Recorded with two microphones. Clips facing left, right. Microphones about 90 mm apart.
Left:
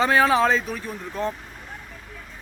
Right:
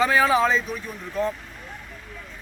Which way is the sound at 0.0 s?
40° left (ahead or behind).